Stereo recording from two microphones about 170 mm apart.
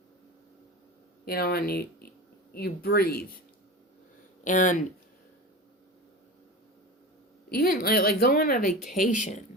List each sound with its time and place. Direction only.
1.2 s a woman's voice: 65° left (ahead or behind)
4.4 s speech: 50° left (ahead or behind)
7.5 s a woman's voice: 60° left (ahead or behind)